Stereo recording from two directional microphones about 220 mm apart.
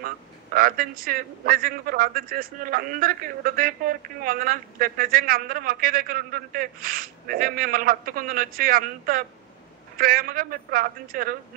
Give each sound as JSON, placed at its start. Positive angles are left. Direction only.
{"t": 0.0, "sound": "a man's voice", "side_deg": -40}